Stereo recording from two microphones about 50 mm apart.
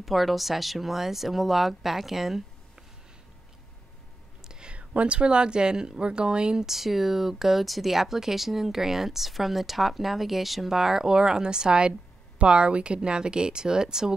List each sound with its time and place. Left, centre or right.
0.0 s speech: centre
4.5 s speech: centre